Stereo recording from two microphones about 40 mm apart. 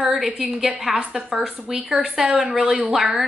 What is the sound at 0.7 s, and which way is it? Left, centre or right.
A woman's voice, centre.